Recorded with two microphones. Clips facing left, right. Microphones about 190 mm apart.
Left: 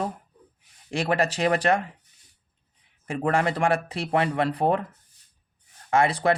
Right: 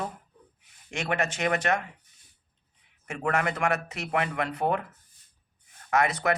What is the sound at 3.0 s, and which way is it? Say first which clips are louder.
Speech: left 4 dB; 30° left (ahead or behind).